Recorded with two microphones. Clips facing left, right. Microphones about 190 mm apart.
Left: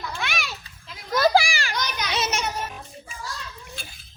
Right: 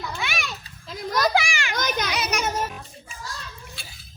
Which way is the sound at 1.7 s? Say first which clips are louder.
Right 6 dB; 50° right (ahead or behind).